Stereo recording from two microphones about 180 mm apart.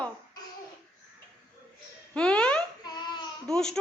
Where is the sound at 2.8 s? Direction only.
25° left (ahead or behind).